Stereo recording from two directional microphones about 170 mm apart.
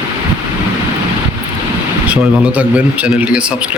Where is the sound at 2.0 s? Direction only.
10° right (ahead or behind).